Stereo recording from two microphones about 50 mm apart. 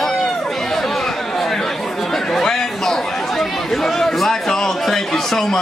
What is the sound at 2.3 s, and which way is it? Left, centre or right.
Chatter, centre.